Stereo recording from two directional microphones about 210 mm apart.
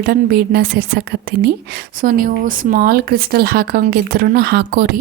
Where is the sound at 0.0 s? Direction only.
45° right (ahead or behind).